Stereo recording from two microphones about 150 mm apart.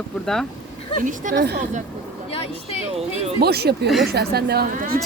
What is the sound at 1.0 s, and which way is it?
Speech, 60° right (ahead or behind).